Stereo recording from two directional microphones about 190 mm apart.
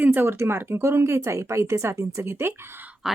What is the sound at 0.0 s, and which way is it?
Speech, 10° right (ahead or behind).